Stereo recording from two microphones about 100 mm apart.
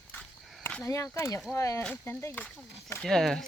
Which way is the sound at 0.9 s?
30° left (ahead or behind).